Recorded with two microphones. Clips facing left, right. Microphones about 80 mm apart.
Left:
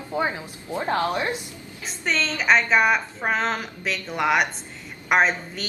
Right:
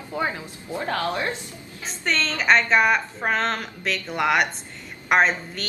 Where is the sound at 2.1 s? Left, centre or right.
Centre.